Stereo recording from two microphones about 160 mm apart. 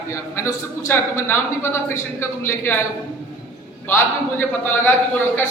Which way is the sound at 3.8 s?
15° left (ahead or behind).